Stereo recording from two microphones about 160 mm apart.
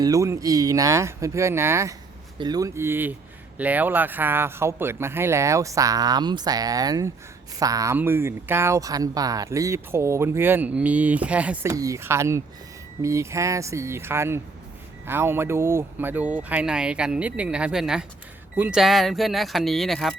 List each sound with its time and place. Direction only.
0.0 s speech: 20° right (ahead or behind)
11.7 s speech: 20° right (ahead or behind); by 20.1 s centre (ahead or behind)